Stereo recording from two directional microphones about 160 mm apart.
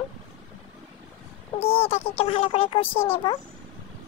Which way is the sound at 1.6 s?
35° left (ahead or behind).